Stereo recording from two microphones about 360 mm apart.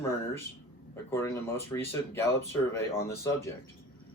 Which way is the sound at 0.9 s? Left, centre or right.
Centre.